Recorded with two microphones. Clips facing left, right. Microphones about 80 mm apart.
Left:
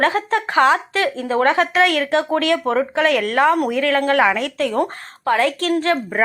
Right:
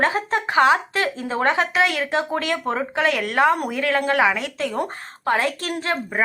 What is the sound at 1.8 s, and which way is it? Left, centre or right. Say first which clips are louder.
Speech: left 4 dB; left.